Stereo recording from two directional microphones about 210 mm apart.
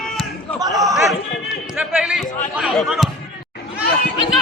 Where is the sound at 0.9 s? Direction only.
Centre (ahead or behind).